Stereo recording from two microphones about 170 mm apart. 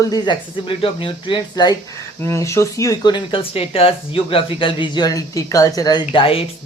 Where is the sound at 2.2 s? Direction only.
15° left (ahead or behind).